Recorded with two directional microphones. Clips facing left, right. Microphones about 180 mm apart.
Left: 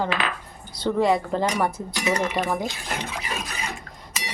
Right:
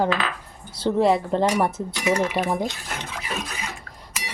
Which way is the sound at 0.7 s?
30° right (ahead or behind).